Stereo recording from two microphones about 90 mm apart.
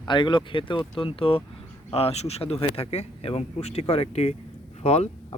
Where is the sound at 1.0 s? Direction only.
90° left.